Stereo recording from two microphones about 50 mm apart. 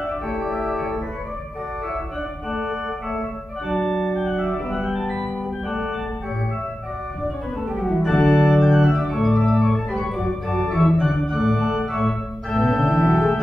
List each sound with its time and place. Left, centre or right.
0.3 s organ: centre
2.5 s organ: centre
7.8 s organ: centre